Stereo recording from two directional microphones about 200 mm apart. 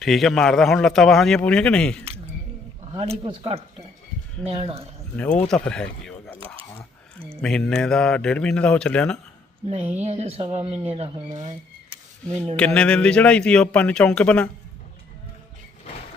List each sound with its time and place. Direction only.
0.0 s a man's voice: centre (ahead or behind)
2.9 s speech: 25° right (ahead or behind)
5.1 s a man's voice: 10° left (ahead or behind)
7.4 s a man's voice: 5° left (ahead or behind)
10.0 s speech: 35° right (ahead or behind)
12.5 s a man's voice: 5° left (ahead or behind)